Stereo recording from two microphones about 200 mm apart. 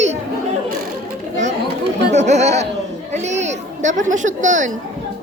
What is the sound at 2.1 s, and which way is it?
Speech, 35° right (ahead or behind).